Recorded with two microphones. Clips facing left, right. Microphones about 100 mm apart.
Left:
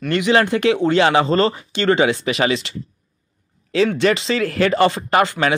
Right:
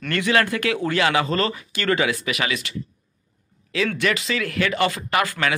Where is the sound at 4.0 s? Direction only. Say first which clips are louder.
Left 6 dB; 30° left (ahead or behind).